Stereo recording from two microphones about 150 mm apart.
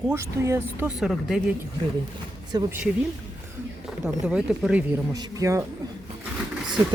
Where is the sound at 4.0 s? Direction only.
5° right (ahead or behind).